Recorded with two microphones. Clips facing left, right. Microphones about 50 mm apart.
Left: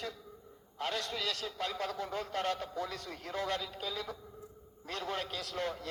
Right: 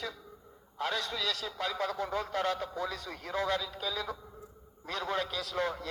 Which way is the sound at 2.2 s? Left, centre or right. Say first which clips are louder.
Right 3 dB; right.